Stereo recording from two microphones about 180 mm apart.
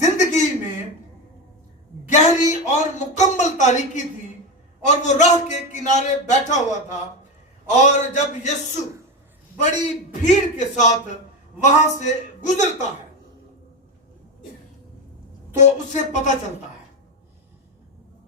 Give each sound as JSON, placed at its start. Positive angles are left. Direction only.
{"t": 0.0, "sound": "a sound", "side_deg": 40}
{"t": 2.0, "sound": "speech", "side_deg": 40}
{"t": 5.0, "sound": "speech", "side_deg": 40}
{"t": 9.8, "sound": "speech", "side_deg": 40}
{"t": 15.5, "sound": "speech", "side_deg": 40}